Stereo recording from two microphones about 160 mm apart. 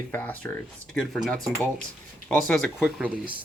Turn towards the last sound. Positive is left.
turn(degrees=0)  # may be behind; listen again after turning